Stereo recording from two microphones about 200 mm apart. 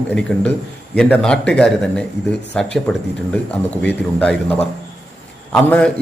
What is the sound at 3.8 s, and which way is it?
A man's voice, 5° left (ahead or behind).